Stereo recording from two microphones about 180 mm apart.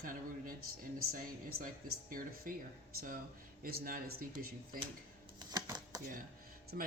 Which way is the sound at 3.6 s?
55° right (ahead or behind).